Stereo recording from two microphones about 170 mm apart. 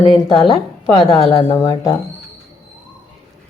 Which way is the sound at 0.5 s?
30° left (ahead or behind).